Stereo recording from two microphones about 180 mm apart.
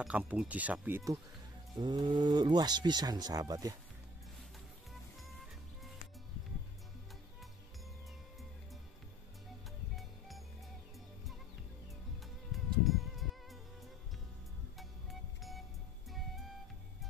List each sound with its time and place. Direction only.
0.0 s speech: 5° right (ahead or behind)
9.9 s music: centre (ahead or behind)
12.5 s music: centre (ahead or behind)
14.8 s music: centre (ahead or behind)